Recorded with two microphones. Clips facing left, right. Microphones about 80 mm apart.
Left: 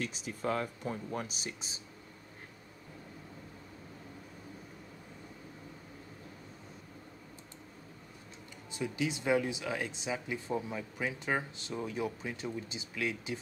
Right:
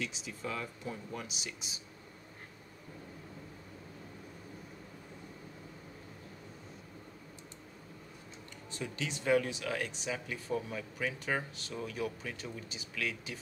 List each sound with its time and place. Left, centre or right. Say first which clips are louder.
0.0 s speech: left 4 dB; left
8.7 s speech: left 5 dB; centre